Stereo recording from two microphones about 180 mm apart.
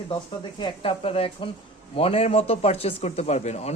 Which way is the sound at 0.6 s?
30° left (ahead or behind).